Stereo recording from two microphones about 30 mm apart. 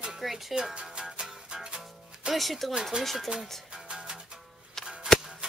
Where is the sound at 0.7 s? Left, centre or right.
Right.